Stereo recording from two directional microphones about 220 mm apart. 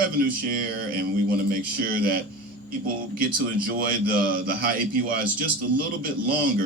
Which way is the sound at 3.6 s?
40° right (ahead or behind).